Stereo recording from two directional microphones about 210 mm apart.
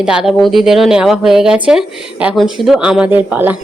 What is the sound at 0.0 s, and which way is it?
Speech, 5° right (ahead or behind).